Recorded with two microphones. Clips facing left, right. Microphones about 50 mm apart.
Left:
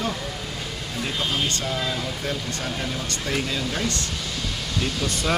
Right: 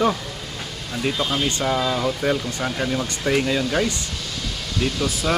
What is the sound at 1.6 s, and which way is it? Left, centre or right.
Speech, right.